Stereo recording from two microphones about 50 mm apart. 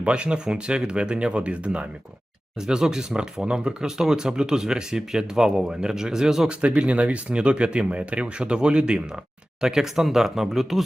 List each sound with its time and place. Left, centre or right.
0.0 s speech: right
6.5 s speech: right; by 10.8 s centre